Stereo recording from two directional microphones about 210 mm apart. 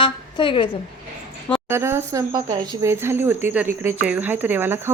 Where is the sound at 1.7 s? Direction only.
10° right (ahead or behind).